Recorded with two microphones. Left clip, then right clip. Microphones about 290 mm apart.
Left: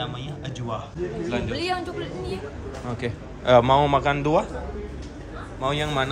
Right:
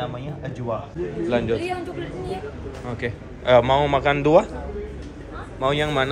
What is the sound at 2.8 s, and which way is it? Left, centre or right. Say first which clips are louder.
Speech: right 2 dB; centre.